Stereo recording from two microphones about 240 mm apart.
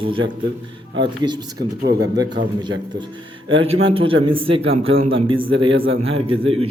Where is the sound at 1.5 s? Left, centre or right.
Right.